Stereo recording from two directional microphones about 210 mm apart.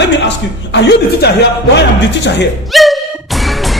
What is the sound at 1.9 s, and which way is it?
Speech, 55° left (ahead or behind).